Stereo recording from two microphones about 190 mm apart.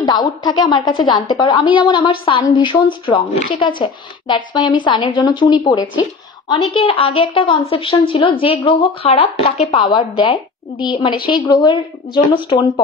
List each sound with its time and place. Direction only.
0.0 s a woman's voice: 20° left (ahead or behind)